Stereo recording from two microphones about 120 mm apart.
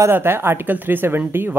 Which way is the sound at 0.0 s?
20° right (ahead or behind).